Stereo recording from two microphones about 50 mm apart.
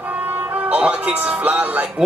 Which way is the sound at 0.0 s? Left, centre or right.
Right.